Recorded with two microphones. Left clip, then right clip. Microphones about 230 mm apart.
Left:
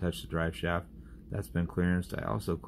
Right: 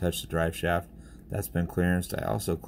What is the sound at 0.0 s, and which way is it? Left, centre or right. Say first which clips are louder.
Speech: right 5 dB; right.